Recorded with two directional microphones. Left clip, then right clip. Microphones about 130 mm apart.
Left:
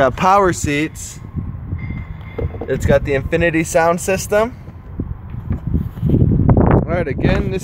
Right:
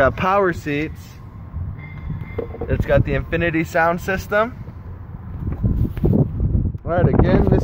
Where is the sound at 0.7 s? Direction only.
45° left (ahead or behind).